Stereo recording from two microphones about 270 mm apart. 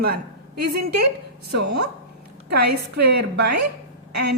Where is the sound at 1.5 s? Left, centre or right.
Right.